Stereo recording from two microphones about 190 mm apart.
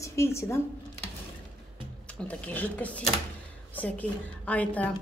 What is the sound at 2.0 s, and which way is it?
A woman's voice, 5° left (ahead or behind).